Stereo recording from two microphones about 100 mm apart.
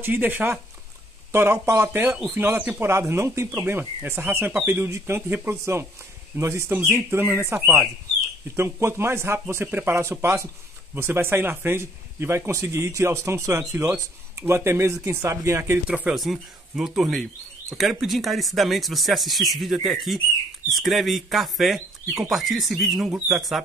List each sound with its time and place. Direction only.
0.0 s a man's voice: 20° right (ahead or behind)
16.2 s speech: 5° right (ahead or behind)